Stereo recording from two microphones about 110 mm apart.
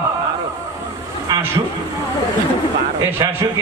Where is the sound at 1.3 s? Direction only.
35° right (ahead or behind).